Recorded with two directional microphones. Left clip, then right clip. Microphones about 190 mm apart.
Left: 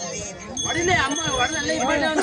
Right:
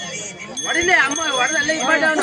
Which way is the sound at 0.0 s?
45° left (ahead or behind).